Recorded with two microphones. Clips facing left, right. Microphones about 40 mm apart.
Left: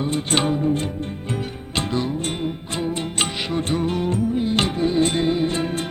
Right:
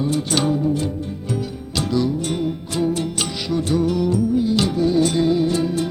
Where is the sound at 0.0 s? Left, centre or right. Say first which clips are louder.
Right 1 dB; left.